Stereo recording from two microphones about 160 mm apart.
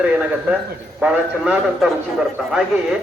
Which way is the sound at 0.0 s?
5° right (ahead or behind).